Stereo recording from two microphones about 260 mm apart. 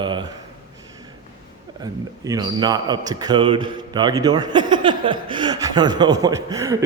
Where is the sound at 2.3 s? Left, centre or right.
Centre.